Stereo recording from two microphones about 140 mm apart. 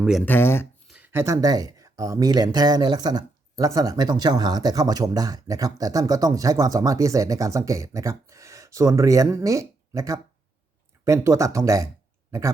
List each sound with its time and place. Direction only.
0.0 s speech: centre (ahead or behind)
0.3 s speech: 15° left (ahead or behind)
0.9 s speech: 10° right (ahead or behind)